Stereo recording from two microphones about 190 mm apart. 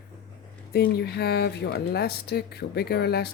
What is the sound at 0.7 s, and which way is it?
Speech, 55° left (ahead or behind).